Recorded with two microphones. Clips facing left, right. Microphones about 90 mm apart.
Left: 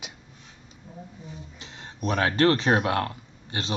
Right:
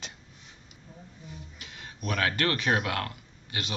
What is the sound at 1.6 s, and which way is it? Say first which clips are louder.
Speech: left 7 dB; 30° left (ahead or behind).